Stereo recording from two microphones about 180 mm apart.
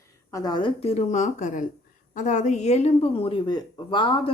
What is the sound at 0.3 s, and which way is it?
A woman's voice, 25° left (ahead or behind).